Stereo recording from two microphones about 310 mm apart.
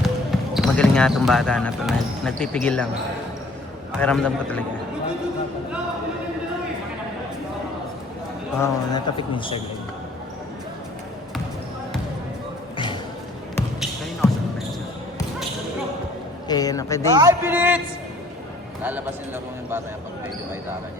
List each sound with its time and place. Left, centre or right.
0.0 s speech: centre
4.0 s a man's voice: centre
8.6 s a man's voice: centre
12.7 s a sound: centre
13.6 s basketball bounce: centre
16.5 s a man's voice: centre
17.1 s a man's voice: centre